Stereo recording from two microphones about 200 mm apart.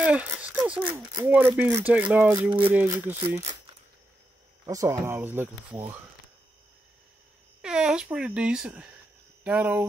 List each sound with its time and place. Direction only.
0.0 s a sound: 5° right (ahead or behind)
0.9 s speech: 20° right (ahead or behind)
4.6 s speech: 15° right (ahead or behind)
7.6 s speech: 5° right (ahead or behind)